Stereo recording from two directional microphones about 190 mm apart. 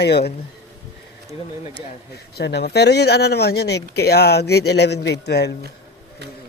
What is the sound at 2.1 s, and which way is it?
Speech, 60° left (ahead or behind).